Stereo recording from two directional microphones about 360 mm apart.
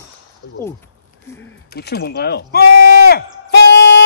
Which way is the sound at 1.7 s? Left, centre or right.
Left.